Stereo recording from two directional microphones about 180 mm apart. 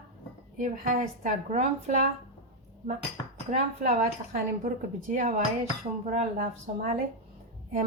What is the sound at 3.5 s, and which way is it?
A woman's voice, 45° right (ahead or behind).